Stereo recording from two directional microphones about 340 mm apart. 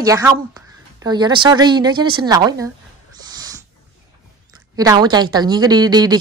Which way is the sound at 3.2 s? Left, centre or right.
Centre.